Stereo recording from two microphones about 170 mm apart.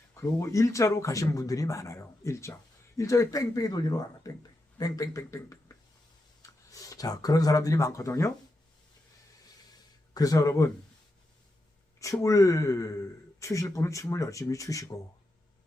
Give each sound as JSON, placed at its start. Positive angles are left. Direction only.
{"t": 0.1, "sound": "speech", "side_deg": 15}
{"t": 10.2, "sound": "speech", "side_deg": 20}
{"t": 11.9, "sound": "speech", "side_deg": 20}